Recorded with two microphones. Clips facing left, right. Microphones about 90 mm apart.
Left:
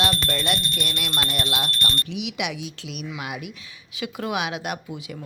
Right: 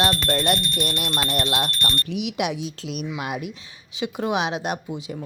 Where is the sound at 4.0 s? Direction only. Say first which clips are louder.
Right 3 dB; 25° right (ahead or behind).